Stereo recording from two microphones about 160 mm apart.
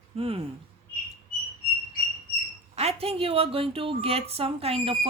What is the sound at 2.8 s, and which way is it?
Speech, 40° right (ahead or behind).